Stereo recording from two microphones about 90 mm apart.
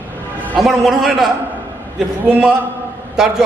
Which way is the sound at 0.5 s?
Centre (ahead or behind).